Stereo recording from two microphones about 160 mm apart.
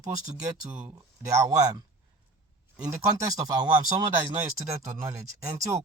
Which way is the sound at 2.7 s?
25° right (ahead or behind).